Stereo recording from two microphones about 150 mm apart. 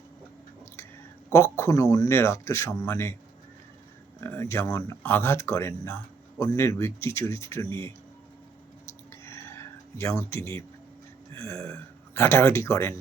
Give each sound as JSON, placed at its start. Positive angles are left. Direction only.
{"t": 1.3, "sound": "speech", "side_deg": 20}
{"t": 4.2, "sound": "speech", "side_deg": 15}
{"t": 9.2, "sound": "a sound", "side_deg": 15}
{"t": 11.3, "sound": "speech", "side_deg": 20}